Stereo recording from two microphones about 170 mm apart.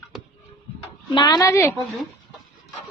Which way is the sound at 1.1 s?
25° left (ahead or behind).